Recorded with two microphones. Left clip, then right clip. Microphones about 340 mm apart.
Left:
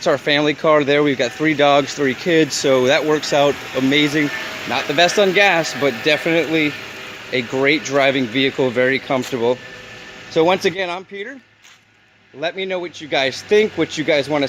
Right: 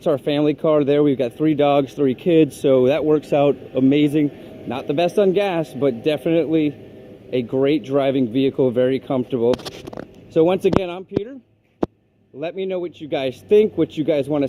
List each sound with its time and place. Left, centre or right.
0.0 s speech: left
12.4 s speech: left